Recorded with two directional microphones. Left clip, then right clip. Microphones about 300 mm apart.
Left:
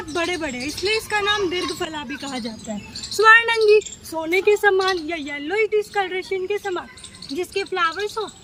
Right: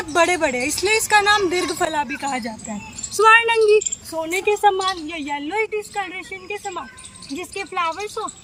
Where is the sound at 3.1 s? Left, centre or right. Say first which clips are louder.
Even; centre.